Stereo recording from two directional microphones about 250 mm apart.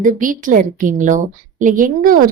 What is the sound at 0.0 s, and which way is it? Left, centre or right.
A woman's voice, right.